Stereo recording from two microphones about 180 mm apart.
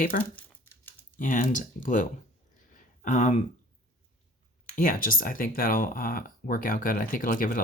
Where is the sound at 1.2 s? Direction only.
45° left (ahead or behind).